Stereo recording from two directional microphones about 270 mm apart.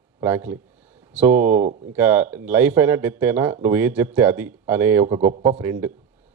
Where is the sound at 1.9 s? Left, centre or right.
Centre.